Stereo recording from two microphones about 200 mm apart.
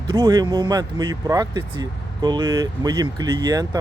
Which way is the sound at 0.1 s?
20° right (ahead or behind).